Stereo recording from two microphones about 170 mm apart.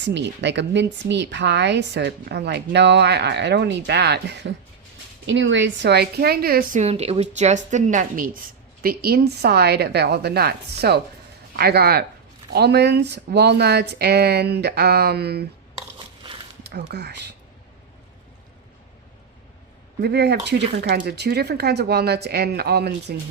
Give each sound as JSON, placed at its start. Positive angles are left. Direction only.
{"t": 0.0, "sound": "a woman's voice", "side_deg": -90}
{"t": 16.6, "sound": "a woman's voice", "side_deg": -75}
{"t": 20.0, "sound": "a woman's voice", "side_deg": -70}
{"t": 20.8, "sound": "a woman's voice", "side_deg": -70}